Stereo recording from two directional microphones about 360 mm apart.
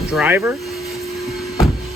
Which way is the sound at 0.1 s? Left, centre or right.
Centre.